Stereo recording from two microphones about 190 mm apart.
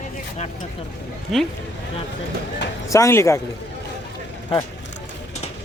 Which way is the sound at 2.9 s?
15° left (ahead or behind).